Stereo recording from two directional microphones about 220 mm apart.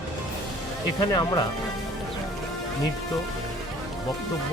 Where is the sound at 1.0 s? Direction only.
20° left (ahead or behind).